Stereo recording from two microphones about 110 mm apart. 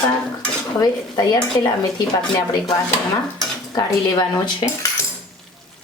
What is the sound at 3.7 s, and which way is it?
Speech, 40° left (ahead or behind).